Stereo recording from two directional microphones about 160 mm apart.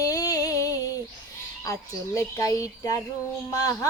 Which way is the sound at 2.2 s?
20° left (ahead or behind).